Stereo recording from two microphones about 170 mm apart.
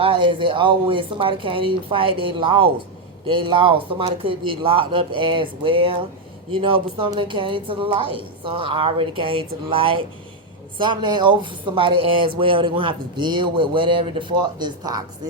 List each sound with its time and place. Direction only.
0.0 s speech: 30° right (ahead or behind)